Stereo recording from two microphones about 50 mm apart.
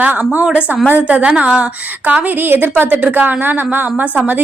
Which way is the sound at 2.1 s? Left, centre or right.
Right.